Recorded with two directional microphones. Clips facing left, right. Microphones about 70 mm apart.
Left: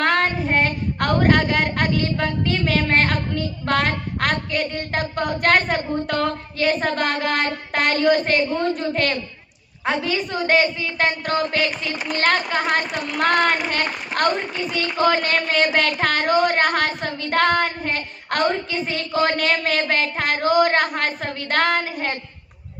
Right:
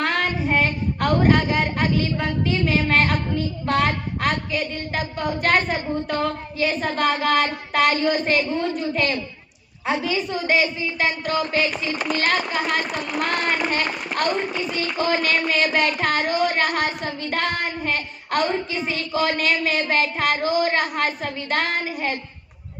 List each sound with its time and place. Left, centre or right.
0.0 s child singing: left
7.3 s a woman's voice: left
15.5 s a sound: left
16.0 s a woman's voice: left